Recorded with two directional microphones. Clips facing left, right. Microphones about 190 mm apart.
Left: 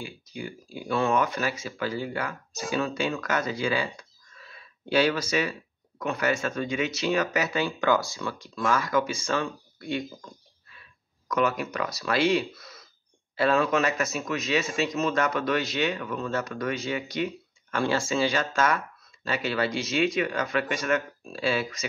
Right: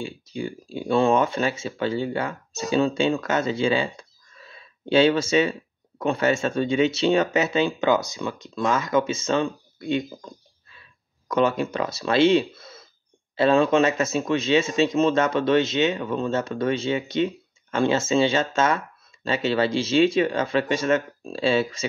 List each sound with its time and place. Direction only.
0.0 s speech: 25° right (ahead or behind)
11.2 s speech: 25° right (ahead or behind)